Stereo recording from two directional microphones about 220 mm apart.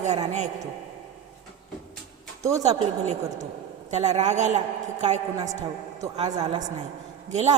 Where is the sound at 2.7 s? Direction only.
30° right (ahead or behind).